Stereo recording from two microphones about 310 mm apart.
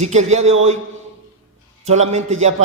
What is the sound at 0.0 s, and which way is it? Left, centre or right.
Speech, right.